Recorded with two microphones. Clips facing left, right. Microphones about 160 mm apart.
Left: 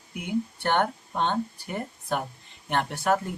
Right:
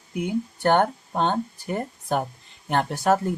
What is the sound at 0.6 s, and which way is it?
Speech, 40° right (ahead or behind).